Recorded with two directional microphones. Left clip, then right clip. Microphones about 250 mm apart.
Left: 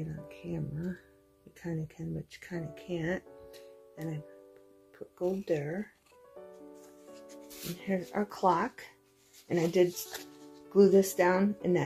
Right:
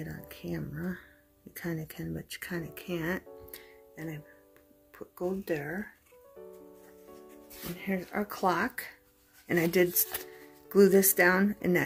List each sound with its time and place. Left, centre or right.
0.0 s speech: right
5.4 s speech: centre
7.8 s speech: centre